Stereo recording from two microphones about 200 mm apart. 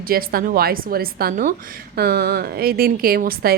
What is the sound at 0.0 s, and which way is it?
A woman's voice, 45° right (ahead or behind).